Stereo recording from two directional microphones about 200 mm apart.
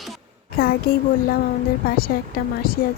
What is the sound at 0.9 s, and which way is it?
Speech, 50° left (ahead or behind).